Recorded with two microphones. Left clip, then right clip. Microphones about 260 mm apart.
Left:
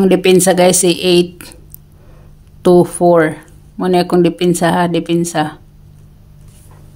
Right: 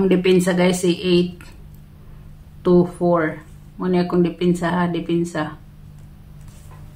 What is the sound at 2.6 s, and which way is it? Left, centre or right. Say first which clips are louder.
Speech: left 8 dB; left.